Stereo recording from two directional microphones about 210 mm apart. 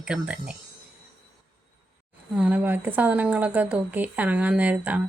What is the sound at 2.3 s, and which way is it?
Speech, 5° right (ahead or behind).